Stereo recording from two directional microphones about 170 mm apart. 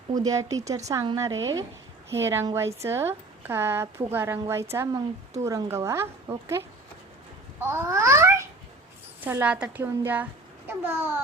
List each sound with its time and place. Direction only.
0.1 s a woman's voice: 20° right (ahead or behind)